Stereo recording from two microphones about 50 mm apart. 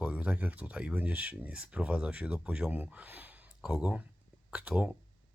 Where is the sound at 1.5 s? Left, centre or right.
Right.